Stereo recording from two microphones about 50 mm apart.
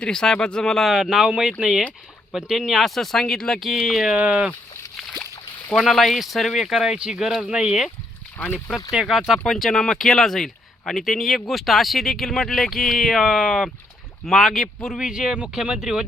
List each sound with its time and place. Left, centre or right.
0.0 s speech: centre
0.9 s speech: centre
3.6 s speech: centre
4.1 s speech: right
4.9 s a sound: centre
5.7 s speech: centre
8.4 s speech: left
8.9 s speech: centre
9.5 s speech: centre
14.9 s speech: centre